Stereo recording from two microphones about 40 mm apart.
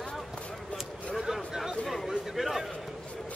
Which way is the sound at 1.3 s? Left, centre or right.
Centre.